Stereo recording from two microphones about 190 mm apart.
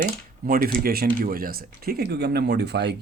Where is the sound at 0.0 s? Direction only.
45° right (ahead or behind).